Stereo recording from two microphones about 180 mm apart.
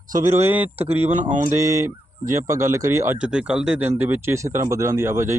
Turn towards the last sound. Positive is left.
turn(degrees=-15)  # may be behind; listen again after turning